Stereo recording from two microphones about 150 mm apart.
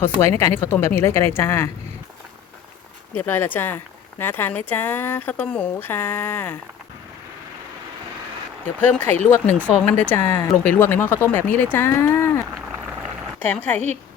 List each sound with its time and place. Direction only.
0.0 s speech: 15° left (ahead or behind)
3.2 s speech: 15° left (ahead or behind)
8.8 s speech: 10° left (ahead or behind)
13.4 s speech: 10° left (ahead or behind)